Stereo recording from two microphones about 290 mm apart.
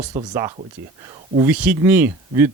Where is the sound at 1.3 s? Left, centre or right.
Centre.